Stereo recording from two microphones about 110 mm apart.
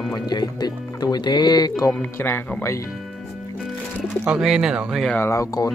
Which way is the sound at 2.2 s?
20° left (ahead or behind).